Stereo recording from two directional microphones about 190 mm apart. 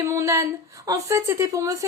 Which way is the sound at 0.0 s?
15° right (ahead or behind).